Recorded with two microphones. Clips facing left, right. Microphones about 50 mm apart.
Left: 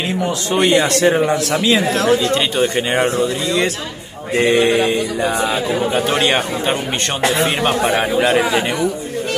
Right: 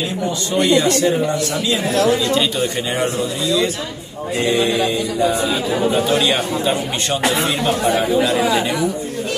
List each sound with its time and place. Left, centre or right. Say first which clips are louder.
0.7 s speech: left 1 dB; left
4.4 s a sound: left 4 dB; left
4.7 s mantra: left 2 dB; left